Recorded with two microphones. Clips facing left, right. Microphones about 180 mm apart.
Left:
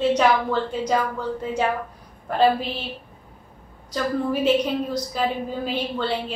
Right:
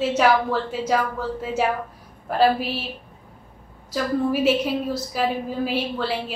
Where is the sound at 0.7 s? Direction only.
5° right (ahead or behind).